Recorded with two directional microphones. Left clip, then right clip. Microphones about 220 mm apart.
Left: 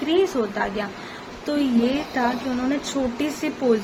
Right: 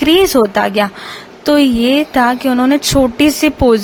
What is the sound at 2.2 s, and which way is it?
A woman's voice, 50° right (ahead or behind).